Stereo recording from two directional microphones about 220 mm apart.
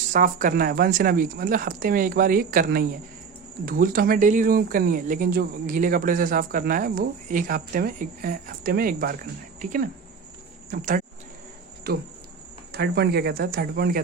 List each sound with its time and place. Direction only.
0.1 s speech: 35° right (ahead or behind)